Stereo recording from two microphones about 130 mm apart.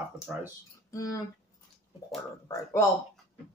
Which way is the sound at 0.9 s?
25° left (ahead or behind).